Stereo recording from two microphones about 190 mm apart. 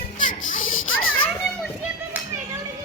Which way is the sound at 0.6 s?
90° left.